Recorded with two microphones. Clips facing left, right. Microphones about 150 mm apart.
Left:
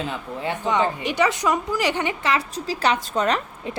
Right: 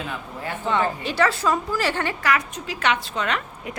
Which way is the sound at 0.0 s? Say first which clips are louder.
Left 4 dB; 20° left (ahead or behind).